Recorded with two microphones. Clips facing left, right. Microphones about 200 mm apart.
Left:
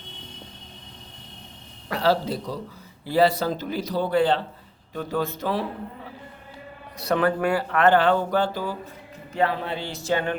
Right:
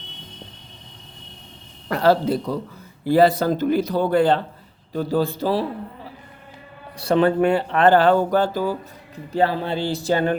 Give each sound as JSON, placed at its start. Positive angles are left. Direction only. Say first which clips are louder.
{"t": 1.9, "sound": "a man's voice", "louder": "right 5 dB", "side_deg": -50}
{"t": 4.9, "sound": "speech", "louder": "right 6 dB", "side_deg": -35}
{"t": 7.0, "sound": "speech", "louder": "right 5 dB", "side_deg": -30}
{"t": 9.3, "sound": "speech", "louder": "right 4 dB", "side_deg": -30}